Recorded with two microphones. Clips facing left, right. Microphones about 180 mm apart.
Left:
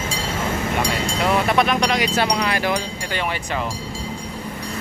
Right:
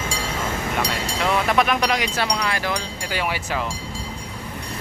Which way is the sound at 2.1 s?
20° left (ahead or behind).